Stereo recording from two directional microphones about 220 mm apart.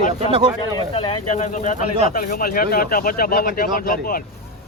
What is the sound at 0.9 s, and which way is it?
Speech, 25° left (ahead or behind).